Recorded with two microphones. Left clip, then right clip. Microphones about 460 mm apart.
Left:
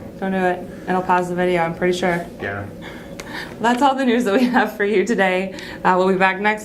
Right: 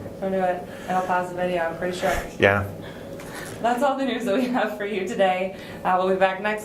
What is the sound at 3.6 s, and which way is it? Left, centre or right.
Speech, left.